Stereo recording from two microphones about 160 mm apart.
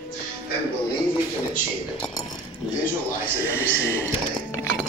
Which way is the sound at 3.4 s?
15° left (ahead or behind).